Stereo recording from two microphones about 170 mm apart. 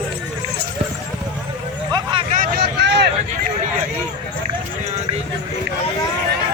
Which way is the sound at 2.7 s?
90° right.